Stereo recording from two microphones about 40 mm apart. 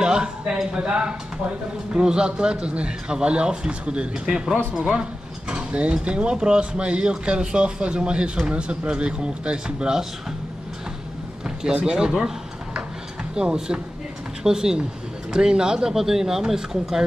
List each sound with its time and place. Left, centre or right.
0.0 s a man's voice: centre
4.7 s speech: centre
5.5 s a man's voice: right
11.4 s speech: centre
12.7 s a sound: right
14.4 s a man's voice: centre